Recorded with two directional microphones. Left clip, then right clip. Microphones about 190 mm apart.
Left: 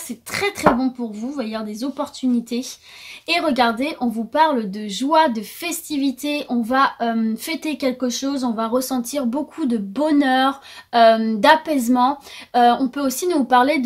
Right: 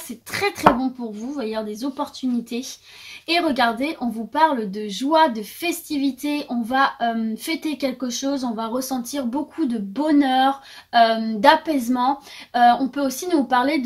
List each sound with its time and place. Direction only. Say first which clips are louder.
0.3 s a woman's voice: even; 35° left (ahead or behind)
3.3 s a woman's voice: left 1 dB; 40° left (ahead or behind)